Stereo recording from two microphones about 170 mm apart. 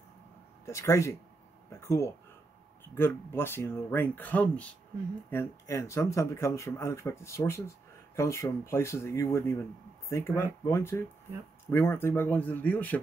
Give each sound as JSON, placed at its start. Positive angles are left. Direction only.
{"t": 0.7, "sound": "speech", "side_deg": 15}
{"t": 1.7, "sound": "a sound", "side_deg": 15}
{"t": 2.8, "sound": "speech", "side_deg": 15}